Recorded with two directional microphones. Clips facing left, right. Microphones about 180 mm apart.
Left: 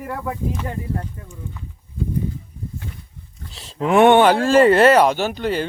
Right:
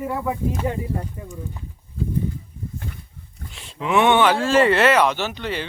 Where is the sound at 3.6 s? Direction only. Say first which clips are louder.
Left 5 dB; 40° left (ahead or behind).